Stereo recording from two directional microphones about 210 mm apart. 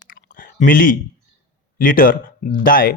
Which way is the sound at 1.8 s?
45° left (ahead or behind).